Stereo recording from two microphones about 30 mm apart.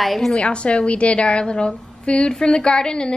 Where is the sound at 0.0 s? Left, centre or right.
Centre.